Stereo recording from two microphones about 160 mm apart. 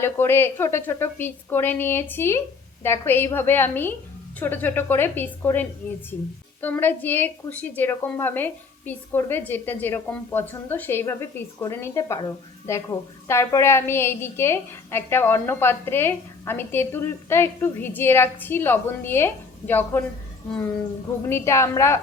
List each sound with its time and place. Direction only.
0.0 s a woman's voice: 15° left (ahead or behind)
21.2 s a woman's voice: 15° left (ahead or behind)